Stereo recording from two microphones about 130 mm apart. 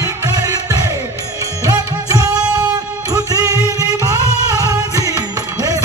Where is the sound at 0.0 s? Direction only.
25° right (ahead or behind).